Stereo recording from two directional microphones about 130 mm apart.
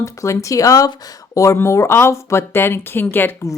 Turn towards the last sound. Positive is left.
turn(degrees=15)  # may be behind; listen again after turning